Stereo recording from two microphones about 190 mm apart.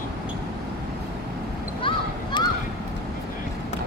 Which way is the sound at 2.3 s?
25° left (ahead or behind).